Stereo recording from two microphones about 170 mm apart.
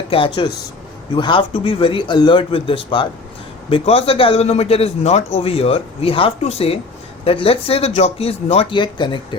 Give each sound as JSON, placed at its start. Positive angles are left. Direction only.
{"t": 0.1, "sound": "a man's voice", "side_deg": 30}